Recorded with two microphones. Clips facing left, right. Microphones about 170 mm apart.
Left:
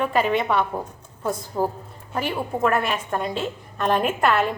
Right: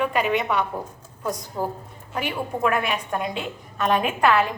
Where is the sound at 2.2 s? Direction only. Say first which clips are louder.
Left 2 dB; 5° right (ahead or behind).